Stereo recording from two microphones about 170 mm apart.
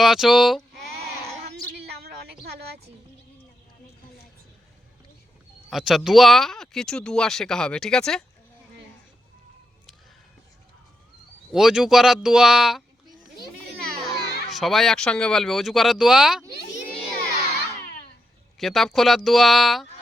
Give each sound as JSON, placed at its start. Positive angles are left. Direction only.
{"t": 0.0, "sound": "speech", "side_deg": 0}
{"t": 1.7, "sound": "a sound", "side_deg": -70}
{"t": 5.7, "sound": "speech", "side_deg": 0}
{"t": 11.5, "sound": "speech", "side_deg": 0}
{"t": 14.3, "sound": "baby cry", "side_deg": 75}
{"t": 14.5, "sound": "speech", "side_deg": 0}
{"t": 18.6, "sound": "speech", "side_deg": 0}